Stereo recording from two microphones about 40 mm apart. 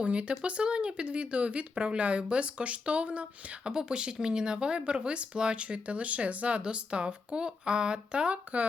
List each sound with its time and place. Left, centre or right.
0.0 s speech: right
3.6 s speech: centre